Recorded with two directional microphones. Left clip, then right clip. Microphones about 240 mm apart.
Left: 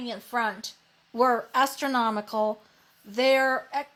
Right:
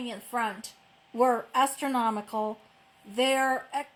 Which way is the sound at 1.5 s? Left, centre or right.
Left.